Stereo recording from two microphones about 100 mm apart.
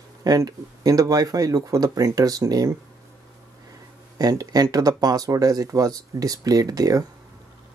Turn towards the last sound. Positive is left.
turn(degrees=-35)  # may be behind; listen again after turning